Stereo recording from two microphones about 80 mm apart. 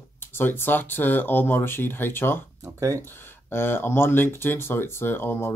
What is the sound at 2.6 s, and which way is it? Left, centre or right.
Speech, right.